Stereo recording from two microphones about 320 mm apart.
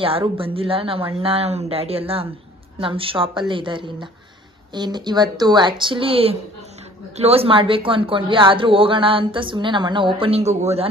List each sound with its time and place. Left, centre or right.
0.0 s speech: centre